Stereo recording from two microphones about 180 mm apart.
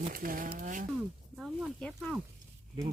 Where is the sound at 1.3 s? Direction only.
Centre (ahead or behind).